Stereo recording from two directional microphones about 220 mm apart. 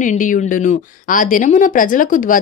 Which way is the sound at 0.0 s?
35° left (ahead or behind).